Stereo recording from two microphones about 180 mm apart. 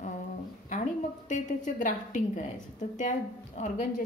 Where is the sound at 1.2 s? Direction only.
45° left (ahead or behind).